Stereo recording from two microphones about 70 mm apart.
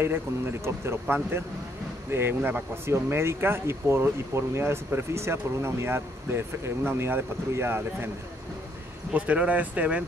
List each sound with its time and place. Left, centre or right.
0.0 s speech: right
9.1 s speech: centre